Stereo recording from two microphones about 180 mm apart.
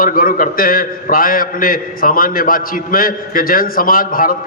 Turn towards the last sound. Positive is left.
turn(degrees=50)  # may be behind; listen again after turning